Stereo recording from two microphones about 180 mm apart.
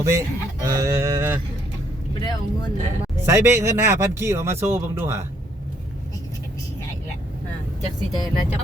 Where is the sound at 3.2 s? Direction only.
15° right (ahead or behind).